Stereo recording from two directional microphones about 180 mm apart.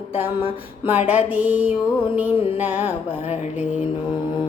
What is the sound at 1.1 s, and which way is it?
Music, 10° right (ahead or behind).